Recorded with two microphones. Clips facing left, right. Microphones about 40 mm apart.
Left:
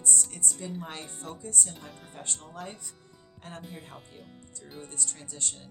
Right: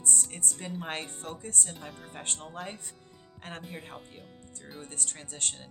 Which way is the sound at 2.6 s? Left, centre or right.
Right.